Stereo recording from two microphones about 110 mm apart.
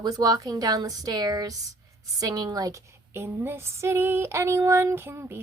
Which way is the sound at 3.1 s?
20° right (ahead or behind).